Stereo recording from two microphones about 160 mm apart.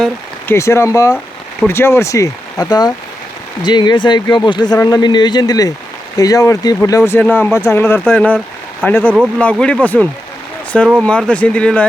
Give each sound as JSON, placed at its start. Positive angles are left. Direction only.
{"t": 0.5, "sound": "speech", "side_deg": 15}